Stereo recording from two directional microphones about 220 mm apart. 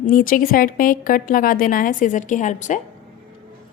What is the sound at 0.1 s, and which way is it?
A woman's voice, 40° left (ahead or behind).